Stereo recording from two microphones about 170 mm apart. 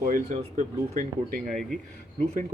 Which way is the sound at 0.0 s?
50° right (ahead or behind).